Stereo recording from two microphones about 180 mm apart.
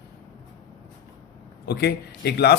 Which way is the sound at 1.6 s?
65° left (ahead or behind).